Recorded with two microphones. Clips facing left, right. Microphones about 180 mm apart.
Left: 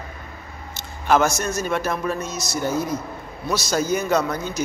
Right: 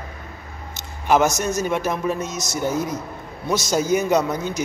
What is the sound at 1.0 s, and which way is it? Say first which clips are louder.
A man's voice: right 1 dB; 15° right (ahead or behind).